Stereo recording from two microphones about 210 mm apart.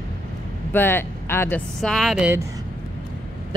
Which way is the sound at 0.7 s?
10° left (ahead or behind).